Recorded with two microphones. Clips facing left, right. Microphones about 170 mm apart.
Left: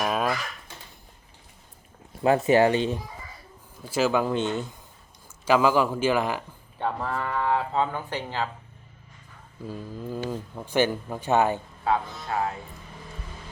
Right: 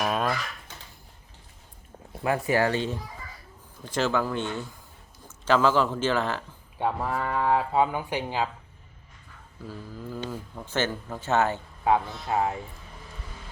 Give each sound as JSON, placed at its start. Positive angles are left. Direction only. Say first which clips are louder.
{"t": 0.0, "sound": "a sound", "louder": "left 1 dB", "side_deg": 5}
{"t": 2.2, "sound": "speech", "louder": "left 5 dB", "side_deg": 25}
{"t": 3.8, "sound": "speech", "louder": "left 3 dB", "side_deg": 10}
{"t": 6.7, "sound": "speech", "louder": "right 1 dB", "side_deg": -10}
{"t": 9.6, "sound": "speech", "louder": "left 4 dB", "side_deg": 15}
{"t": 11.9, "sound": "speech", "louder": "right 2 dB", "side_deg": -20}